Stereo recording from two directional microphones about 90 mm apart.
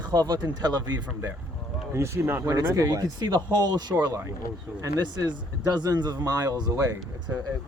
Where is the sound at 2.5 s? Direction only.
45° right (ahead or behind).